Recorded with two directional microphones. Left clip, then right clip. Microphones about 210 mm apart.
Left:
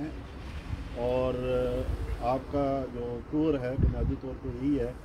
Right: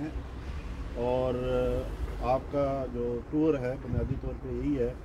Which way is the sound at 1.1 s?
15° left (ahead or behind).